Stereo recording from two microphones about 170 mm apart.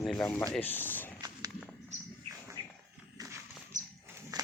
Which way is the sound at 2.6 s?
25° right (ahead or behind).